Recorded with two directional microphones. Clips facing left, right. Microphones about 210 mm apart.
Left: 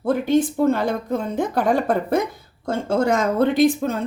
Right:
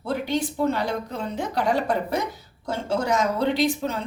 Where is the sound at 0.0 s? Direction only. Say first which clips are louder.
Left 7 dB; 50° left (ahead or behind).